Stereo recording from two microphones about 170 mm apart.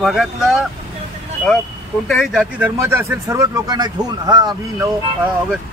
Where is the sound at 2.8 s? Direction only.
15° right (ahead or behind).